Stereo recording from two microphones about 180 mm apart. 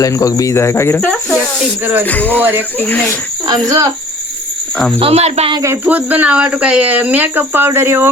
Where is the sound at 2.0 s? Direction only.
10° left (ahead or behind).